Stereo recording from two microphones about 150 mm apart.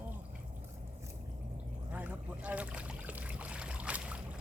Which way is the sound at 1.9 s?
10° right (ahead or behind).